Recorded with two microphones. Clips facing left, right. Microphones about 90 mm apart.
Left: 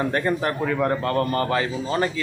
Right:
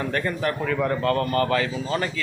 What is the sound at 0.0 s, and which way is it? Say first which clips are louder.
Speech: left 3 dB; 25° left (ahead or behind).